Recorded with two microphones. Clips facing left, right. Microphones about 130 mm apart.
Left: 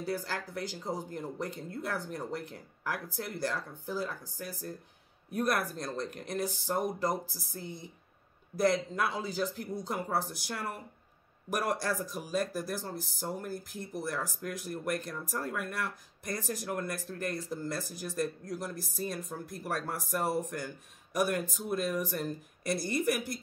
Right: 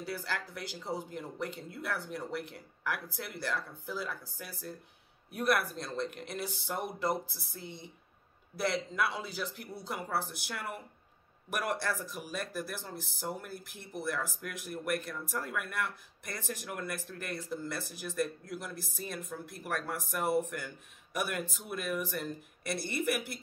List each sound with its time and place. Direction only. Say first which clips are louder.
0.0 s speech: left 3 dB; 45° left (ahead or behind)